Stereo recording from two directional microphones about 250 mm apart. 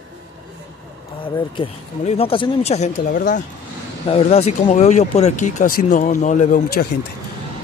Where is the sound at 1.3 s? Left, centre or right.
Centre.